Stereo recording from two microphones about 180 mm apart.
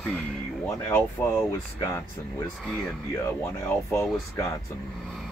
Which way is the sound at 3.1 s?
15° left (ahead or behind).